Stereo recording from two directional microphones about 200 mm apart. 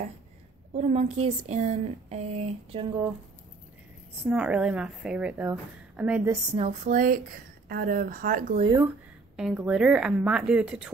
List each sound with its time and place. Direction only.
0.7 s speech: 35° right (ahead or behind)
4.2 s a woman's voice: 5° right (ahead or behind)
6.5 s a woman's voice: 30° right (ahead or behind)
8.6 s speech: 15° right (ahead or behind)
9.4 s a woman's voice: 5° right (ahead or behind)